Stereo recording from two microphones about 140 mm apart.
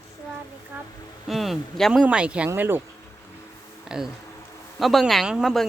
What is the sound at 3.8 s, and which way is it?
Speech, 5° right (ahead or behind).